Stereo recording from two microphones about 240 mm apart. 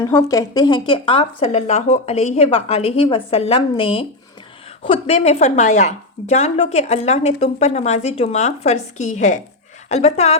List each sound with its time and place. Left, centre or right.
0.1 s speech: centre